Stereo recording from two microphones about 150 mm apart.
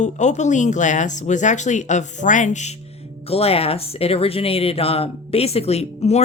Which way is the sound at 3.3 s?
40° left (ahead or behind).